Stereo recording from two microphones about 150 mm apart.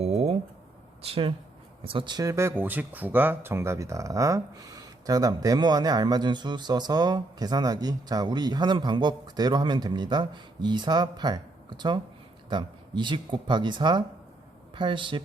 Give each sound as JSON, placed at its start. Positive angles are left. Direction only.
{"t": 0.0, "sound": "a sound", "side_deg": -45}
{"t": 1.0, "sound": "speech", "side_deg": -40}
{"t": 12.5, "sound": "speech", "side_deg": -30}